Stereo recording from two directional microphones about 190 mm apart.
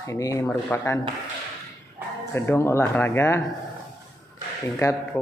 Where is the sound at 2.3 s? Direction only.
10° left (ahead or behind).